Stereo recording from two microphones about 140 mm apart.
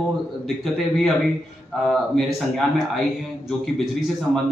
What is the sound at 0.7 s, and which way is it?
A man's voice, centre (ahead or behind).